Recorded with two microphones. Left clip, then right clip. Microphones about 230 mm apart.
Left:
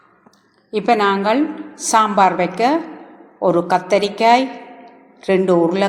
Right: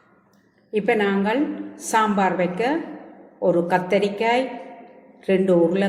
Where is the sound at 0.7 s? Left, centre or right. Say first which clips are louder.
Left 5 dB; centre.